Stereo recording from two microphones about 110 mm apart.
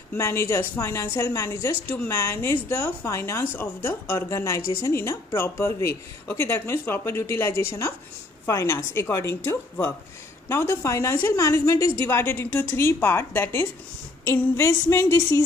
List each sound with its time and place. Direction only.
0.1 s a woman's voice: 25° left (ahead or behind)